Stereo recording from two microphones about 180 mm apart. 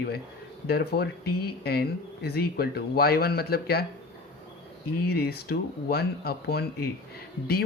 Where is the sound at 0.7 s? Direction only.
60° left (ahead or behind).